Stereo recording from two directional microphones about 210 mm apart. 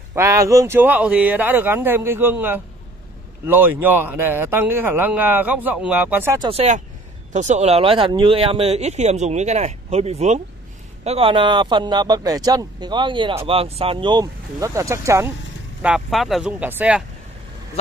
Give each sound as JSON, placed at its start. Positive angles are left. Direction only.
{"t": 0.1, "sound": "a man's voice", "side_deg": -15}
{"t": 6.5, "sound": "speech", "side_deg": -30}
{"t": 15.8, "sound": "speech", "side_deg": 0}